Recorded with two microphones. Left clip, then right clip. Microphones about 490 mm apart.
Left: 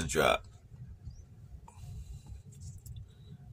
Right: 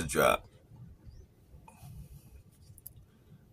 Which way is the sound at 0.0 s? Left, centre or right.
Right.